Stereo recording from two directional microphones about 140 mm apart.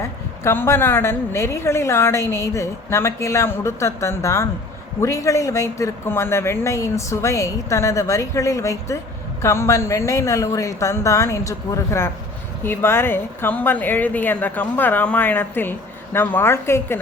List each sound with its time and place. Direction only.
0.0 s a woman's voice: 15° left (ahead or behind)